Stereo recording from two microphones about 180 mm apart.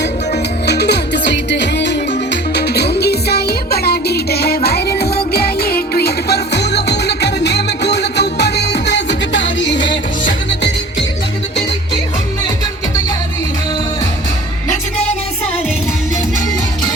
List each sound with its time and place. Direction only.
0.6 s music: 65° left (ahead or behind)